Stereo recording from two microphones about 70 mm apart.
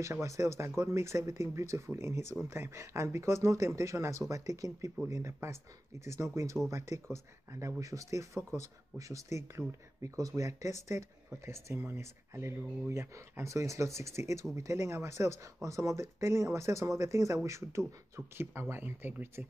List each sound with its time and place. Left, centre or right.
0.0 s speech: right
5.1 s speech: right
10.1 s speech: right